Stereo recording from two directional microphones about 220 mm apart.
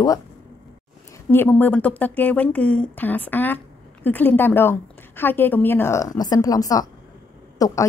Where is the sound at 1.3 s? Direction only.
10° left (ahead or behind).